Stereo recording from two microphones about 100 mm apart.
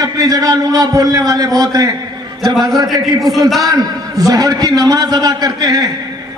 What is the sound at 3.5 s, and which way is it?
A man's voice, 35° right (ahead or behind).